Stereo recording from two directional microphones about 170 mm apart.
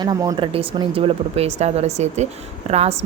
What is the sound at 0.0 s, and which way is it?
Speech, 20° right (ahead or behind).